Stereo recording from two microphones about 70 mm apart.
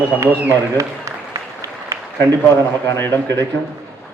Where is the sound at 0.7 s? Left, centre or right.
Right.